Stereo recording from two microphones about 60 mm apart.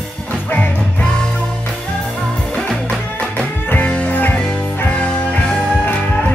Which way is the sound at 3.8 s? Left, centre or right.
Left.